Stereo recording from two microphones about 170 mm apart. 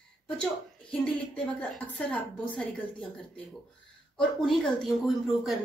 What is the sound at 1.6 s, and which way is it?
A woman's voice, 10° left (ahead or behind).